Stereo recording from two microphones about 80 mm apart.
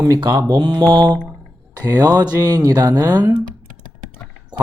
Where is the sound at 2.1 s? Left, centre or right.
Right.